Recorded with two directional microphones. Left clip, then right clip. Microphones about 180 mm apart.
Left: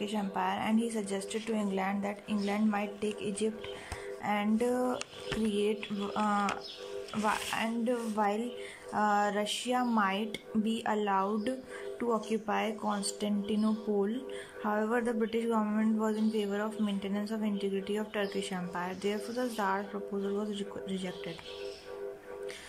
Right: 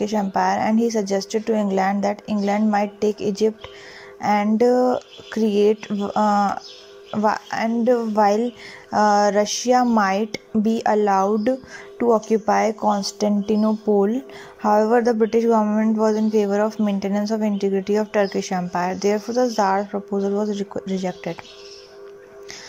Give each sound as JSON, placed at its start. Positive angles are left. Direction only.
{"t": 0.0, "sound": "speech", "side_deg": -40}